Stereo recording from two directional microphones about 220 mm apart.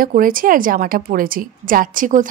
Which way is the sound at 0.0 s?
40° right (ahead or behind).